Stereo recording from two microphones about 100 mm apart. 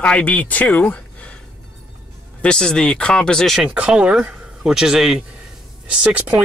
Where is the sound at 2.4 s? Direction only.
10° left (ahead or behind).